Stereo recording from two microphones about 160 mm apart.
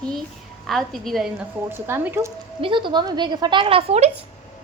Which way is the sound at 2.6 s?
30° right (ahead or behind).